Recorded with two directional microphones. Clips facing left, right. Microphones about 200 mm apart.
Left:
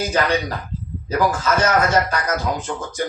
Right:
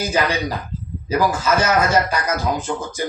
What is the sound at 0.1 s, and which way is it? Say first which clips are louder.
A man's voice: even; 5° right (ahead or behind).